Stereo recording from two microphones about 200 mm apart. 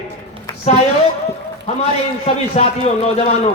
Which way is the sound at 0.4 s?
35° left (ahead or behind).